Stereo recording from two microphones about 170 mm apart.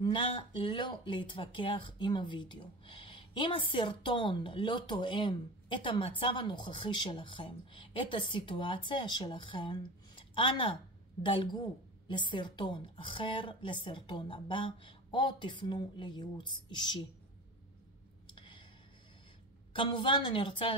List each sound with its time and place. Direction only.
0.0 s speech: 30° left (ahead or behind)
18.3 s a sound: 30° left (ahead or behind)
19.7 s speech: 30° left (ahead or behind)